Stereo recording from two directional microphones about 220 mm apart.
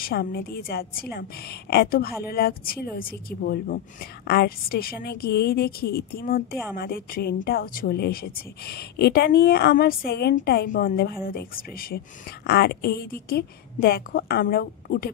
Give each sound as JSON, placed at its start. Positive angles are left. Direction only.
{"t": 0.0, "sound": "a woman's voice", "side_deg": 45}